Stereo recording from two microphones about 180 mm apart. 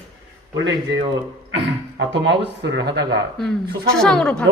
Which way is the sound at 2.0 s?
80° right.